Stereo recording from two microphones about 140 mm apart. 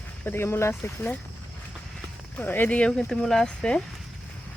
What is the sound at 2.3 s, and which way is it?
Speech, 15° left (ahead or behind).